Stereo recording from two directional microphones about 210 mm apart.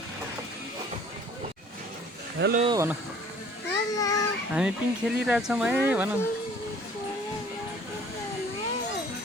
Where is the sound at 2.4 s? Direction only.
55° right (ahead or behind).